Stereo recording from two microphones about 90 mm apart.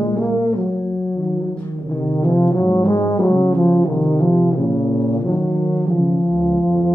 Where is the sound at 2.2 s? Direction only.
35° left (ahead or behind).